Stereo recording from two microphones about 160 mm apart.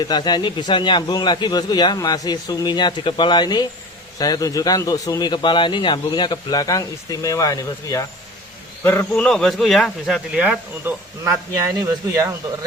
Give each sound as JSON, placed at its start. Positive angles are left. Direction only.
{"t": 0.0, "sound": "a man's voice", "side_deg": 25}
{"t": 8.8, "sound": "speech", "side_deg": 10}